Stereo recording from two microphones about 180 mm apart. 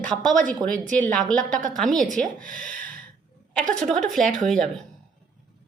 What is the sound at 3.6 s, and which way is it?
Speech, 45° right (ahead or behind).